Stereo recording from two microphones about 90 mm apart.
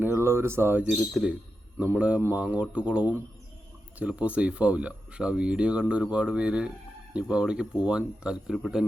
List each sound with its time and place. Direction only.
0.0 s speech: 25° right (ahead or behind)
0.9 s speech: 5° right (ahead or behind)
1.8 s speech: 15° right (ahead or behind); by 8.8 s centre (ahead or behind)